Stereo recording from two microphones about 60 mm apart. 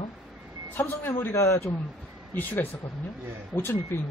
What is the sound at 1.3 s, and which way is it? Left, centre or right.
Speech, left.